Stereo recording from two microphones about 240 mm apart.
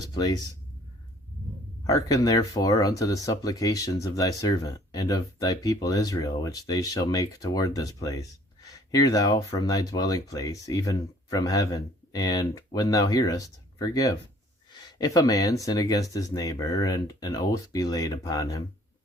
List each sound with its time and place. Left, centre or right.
0.1 s speech: centre
1.9 s speech: centre